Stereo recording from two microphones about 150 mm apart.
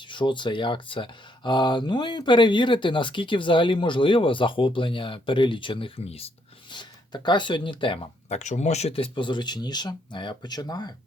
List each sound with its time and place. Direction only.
0.1 s speech: 30° left (ahead or behind)
8.4 s speech: 50° left (ahead or behind); by 10.9 s 25° left (ahead or behind)